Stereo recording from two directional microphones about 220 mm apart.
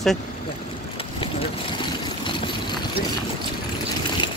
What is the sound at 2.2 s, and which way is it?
Vehicle, 20° left (ahead or behind).